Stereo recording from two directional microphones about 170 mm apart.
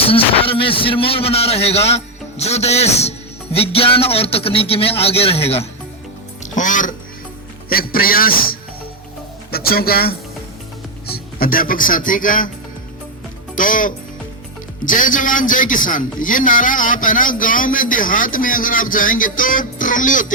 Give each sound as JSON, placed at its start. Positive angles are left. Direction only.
{"t": 0.0, "sound": "a man's voice", "side_deg": 35}
{"t": 6.4, "sound": "speech", "side_deg": 50}
{"t": 7.7, "sound": "a man's voice", "side_deg": 60}
{"t": 13.6, "sound": "a man's voice", "side_deg": 50}